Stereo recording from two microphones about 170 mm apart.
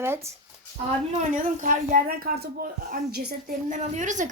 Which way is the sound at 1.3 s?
50° right (ahead or behind).